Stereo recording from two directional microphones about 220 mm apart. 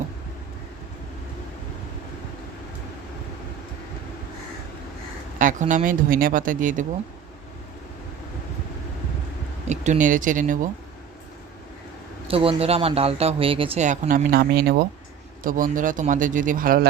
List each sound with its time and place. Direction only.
5.4 s speech: 35° right (ahead or behind)
9.6 s speech: 30° right (ahead or behind)
12.3 s speech: 25° right (ahead or behind); by 16.9 s 40° right (ahead or behind)